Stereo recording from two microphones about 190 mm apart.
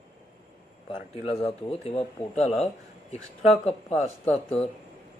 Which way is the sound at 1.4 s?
30° left (ahead or behind).